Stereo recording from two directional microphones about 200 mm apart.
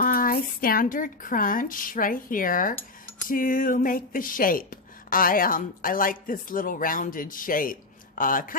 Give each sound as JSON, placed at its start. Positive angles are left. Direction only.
{"t": 0.0, "sound": "speech", "side_deg": 45}